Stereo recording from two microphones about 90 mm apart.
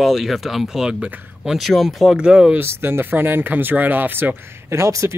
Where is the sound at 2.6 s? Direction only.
25° right (ahead or behind).